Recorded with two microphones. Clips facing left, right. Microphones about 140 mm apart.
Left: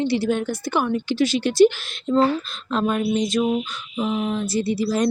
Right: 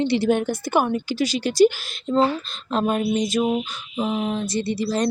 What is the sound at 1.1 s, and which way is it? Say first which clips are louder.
Speech: left 3 dB; centre (ahead or behind).